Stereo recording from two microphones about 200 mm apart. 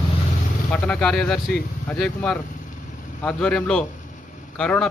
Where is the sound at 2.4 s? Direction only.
40° left (ahead or behind).